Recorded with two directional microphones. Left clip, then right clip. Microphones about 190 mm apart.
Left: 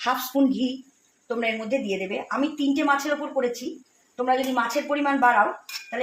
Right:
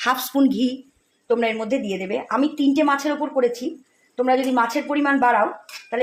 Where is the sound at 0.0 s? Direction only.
50° right (ahead or behind).